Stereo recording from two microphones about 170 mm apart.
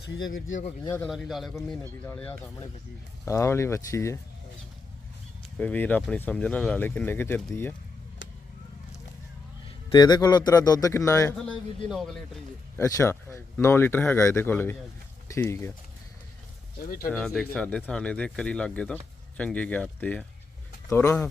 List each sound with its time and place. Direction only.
0.9 s speech: 10° left (ahead or behind)
5.5 s speech: 10° left (ahead or behind)
9.9 s a man's voice: 25° left (ahead or behind)
11.4 s speech: centre (ahead or behind)
12.7 s speech: 15° left (ahead or behind)
16.8 s speech: 55° left (ahead or behind)
17.1 s speech: 5° left (ahead or behind)